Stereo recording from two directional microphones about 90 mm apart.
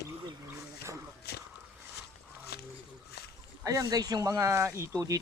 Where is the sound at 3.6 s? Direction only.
40° right (ahead or behind).